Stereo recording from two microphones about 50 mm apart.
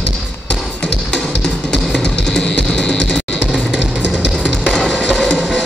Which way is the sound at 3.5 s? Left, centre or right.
Centre.